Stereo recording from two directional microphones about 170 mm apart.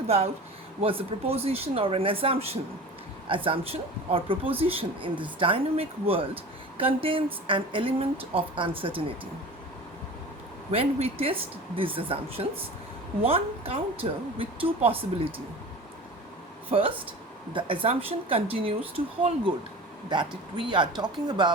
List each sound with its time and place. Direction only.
0.8 s speech: 35° right (ahead or behind)
10.7 s speech: 35° right (ahead or behind)
16.7 s speech: 40° right (ahead or behind)
17.5 s speech: 30° right (ahead or behind)
20.7 s speech: 25° right (ahead or behind)